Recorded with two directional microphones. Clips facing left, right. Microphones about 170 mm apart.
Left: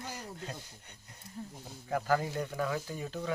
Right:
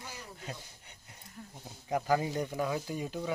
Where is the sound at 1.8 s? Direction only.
15° right (ahead or behind).